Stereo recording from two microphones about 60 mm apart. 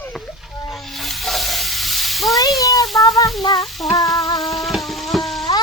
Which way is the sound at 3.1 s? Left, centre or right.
Left.